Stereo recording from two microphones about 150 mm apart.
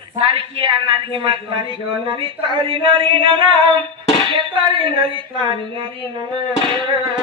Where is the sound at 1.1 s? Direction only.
35° right (ahead or behind).